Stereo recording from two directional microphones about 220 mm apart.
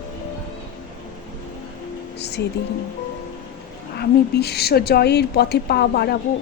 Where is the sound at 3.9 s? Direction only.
45° left (ahead or behind).